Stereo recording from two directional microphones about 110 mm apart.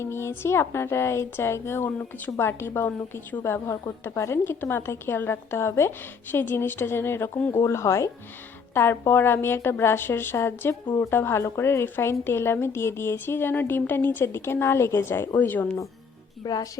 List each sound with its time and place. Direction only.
0.0 s a woman's voice: 25° left (ahead or behind)
10.8 s speech: 35° left (ahead or behind)
11.1 s a woman's voice: 20° left (ahead or behind)
16.4 s a woman's voice: 35° left (ahead or behind)